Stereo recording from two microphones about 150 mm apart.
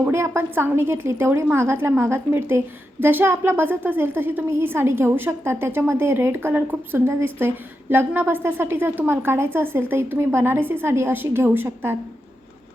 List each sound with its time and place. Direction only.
0.0 s a woman's voice: 15° right (ahead or behind)